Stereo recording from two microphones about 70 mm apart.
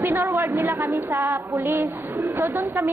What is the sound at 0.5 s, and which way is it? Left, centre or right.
Speech, right.